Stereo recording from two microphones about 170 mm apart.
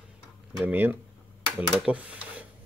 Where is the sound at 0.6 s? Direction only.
10° right (ahead or behind).